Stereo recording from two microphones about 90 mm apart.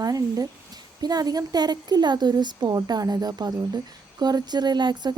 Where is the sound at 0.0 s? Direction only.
45° right (ahead or behind).